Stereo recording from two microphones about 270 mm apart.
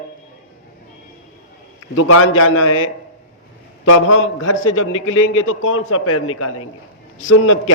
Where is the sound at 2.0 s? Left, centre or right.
Left.